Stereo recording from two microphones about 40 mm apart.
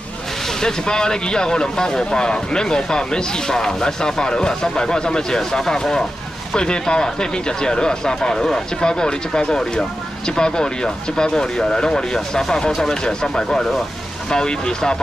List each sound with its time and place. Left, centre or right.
0.6 s speech: centre